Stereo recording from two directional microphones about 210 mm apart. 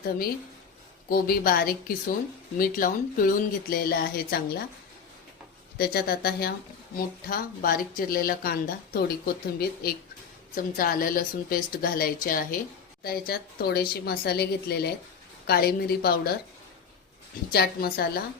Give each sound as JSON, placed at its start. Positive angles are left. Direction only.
{"t": 1.1, "sound": "speech", "side_deg": 45}
{"t": 5.7, "sound": "speech", "side_deg": 45}
{"t": 17.5, "sound": "speech", "side_deg": 45}